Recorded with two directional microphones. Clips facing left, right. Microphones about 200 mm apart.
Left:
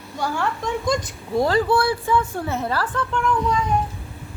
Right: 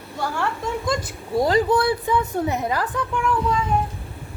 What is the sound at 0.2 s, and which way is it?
Speech, 5° right (ahead or behind).